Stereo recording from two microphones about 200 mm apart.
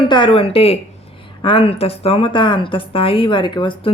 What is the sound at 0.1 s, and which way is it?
A woman's voice, 25° left (ahead or behind).